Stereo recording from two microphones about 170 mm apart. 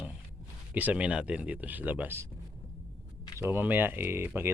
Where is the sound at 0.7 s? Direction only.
10° right (ahead or behind).